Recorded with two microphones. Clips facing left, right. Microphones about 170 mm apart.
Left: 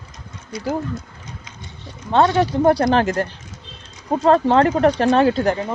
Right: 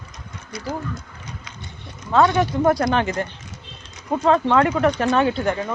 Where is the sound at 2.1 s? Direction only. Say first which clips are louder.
Left 1 dB; 30° left (ahead or behind).